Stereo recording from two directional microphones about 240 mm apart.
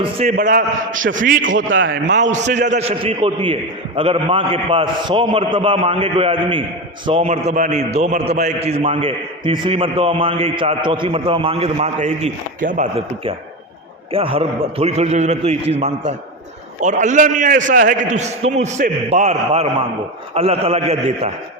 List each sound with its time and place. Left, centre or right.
0.3 s a man's voice: right
1.7 s a man's voice: right
2.1 s a man's voice: right